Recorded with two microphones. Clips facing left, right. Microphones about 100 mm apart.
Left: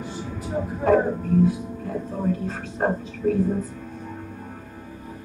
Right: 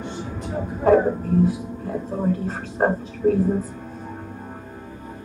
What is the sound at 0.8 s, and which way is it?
Speech, 30° right (ahead or behind).